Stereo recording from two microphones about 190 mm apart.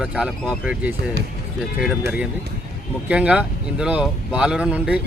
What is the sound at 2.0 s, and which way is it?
Speech, 5° right (ahead or behind).